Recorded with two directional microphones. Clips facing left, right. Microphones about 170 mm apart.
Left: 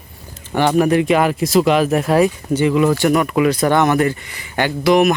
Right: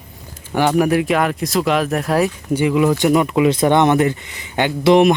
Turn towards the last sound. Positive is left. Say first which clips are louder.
# right 2 dB
turn(degrees=-25)  # may be behind; listen again after turning